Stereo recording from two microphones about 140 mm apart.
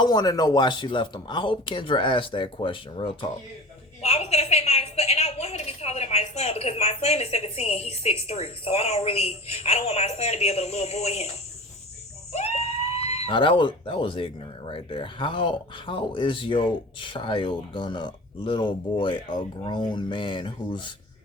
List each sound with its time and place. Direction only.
0.0 s speech: 30° left (ahead or behind)
4.0 s a sound: 50° left (ahead or behind)
8.3 s a woman's voice: 50° left (ahead or behind)
12.3 s speech: 50° left (ahead or behind)